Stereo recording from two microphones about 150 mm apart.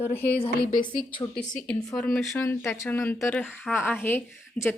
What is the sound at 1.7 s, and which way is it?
Speech, 5° left (ahead or behind).